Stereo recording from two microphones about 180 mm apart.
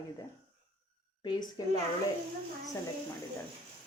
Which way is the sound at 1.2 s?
20° left (ahead or behind).